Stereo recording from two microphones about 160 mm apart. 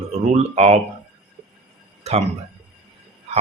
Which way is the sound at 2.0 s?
40° right (ahead or behind).